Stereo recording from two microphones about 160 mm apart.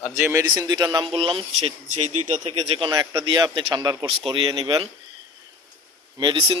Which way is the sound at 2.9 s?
20° right (ahead or behind).